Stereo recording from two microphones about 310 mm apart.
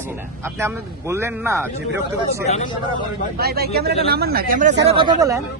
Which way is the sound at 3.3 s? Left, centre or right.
Right.